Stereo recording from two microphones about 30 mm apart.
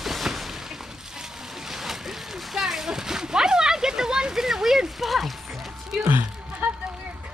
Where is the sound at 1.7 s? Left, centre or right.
Centre.